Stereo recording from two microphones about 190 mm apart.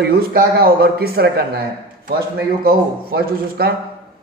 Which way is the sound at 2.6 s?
55° right (ahead or behind).